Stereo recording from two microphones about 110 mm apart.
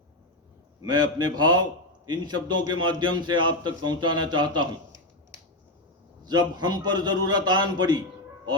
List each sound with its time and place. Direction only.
0.8 s a man's voice: 40° right (ahead or behind)
6.2 s a man's voice: 40° right (ahead or behind)